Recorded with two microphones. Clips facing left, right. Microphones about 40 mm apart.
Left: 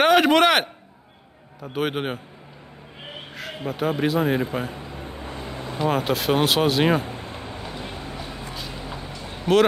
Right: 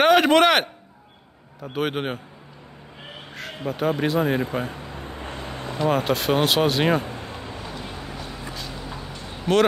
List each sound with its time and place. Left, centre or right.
0.0 s a man's voice: centre
3.3 s speech: centre
5.8 s speech: centre
7.7 s vehicle: left
8.2 s music: centre
9.5 s speech: centre